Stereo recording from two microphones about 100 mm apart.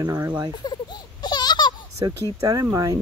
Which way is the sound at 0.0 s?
40° right (ahead or behind).